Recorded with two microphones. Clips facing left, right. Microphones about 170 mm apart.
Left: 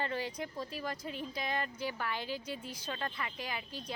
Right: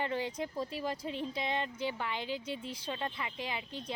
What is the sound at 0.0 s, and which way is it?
Speech, 20° right (ahead or behind).